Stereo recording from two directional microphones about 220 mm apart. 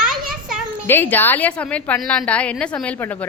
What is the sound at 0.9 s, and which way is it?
A woman's voice, 10° left (ahead or behind).